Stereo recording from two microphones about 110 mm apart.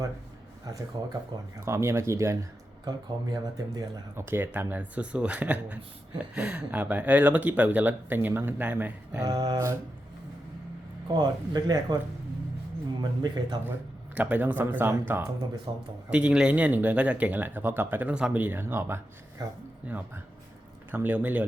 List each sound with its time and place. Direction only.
0.9 s speech: 40° right (ahead or behind)
1.6 s speech: 25° right (ahead or behind)
4.1 s speech: 20° right (ahead or behind)
9.2 s speech: 35° right (ahead or behind)
11.1 s speech: 40° right (ahead or behind)
13.0 s speech: 40° right (ahead or behind)
14.2 s speech: 15° right (ahead or behind)
15.7 s speech: 45° right (ahead or behind)
16.0 s speech: 10° right (ahead or behind); by 19.6 s 35° right (ahead or behind)
19.9 s speech: 15° right (ahead or behind)